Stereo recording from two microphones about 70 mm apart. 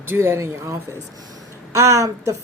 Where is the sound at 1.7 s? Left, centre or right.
Right.